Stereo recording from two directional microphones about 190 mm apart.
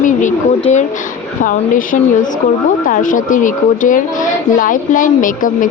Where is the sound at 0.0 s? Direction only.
40° left (ahead or behind).